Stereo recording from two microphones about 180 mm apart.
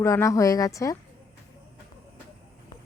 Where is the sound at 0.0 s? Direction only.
15° left (ahead or behind).